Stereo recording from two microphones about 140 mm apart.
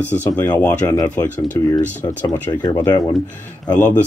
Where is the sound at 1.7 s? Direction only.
25° left (ahead or behind).